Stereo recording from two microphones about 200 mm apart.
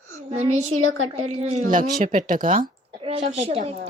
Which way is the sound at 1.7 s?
40° right (ahead or behind).